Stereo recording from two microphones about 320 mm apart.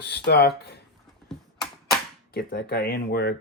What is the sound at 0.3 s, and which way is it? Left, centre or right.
Speech, left.